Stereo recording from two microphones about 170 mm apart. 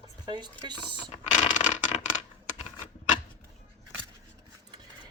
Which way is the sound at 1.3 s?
45° left (ahead or behind).